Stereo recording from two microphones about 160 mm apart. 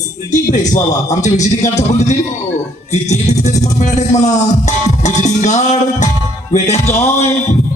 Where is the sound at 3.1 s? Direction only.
45° left (ahead or behind).